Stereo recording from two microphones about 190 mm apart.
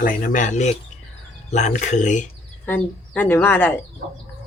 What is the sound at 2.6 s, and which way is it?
Speech, 10° left (ahead or behind).